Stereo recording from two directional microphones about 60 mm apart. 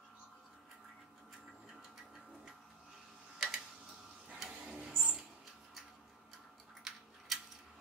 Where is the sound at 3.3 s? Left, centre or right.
Centre.